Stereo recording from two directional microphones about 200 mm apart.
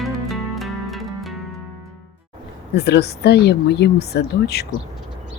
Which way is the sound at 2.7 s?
55° left (ahead or behind).